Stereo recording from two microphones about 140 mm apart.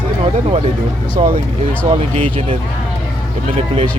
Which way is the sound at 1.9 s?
40° right (ahead or behind).